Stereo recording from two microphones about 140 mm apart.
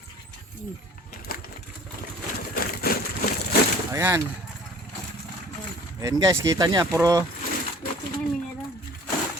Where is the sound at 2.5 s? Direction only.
90° left.